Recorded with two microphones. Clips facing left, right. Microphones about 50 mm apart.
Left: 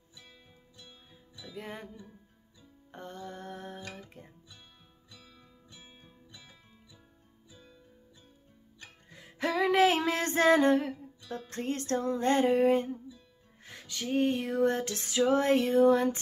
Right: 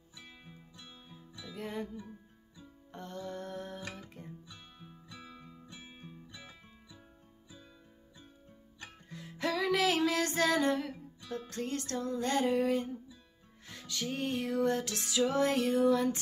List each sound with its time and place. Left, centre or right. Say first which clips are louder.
0.1 s music: right 3 dB; right
1.5 s music: right 3 dB; centre
2.9 s music: right 1 dB; centre
4.5 s music: right 4 dB; right
9.1 s music: left 3 dB; centre; by 12.9 s left
13.7 s music: left 3 dB; centre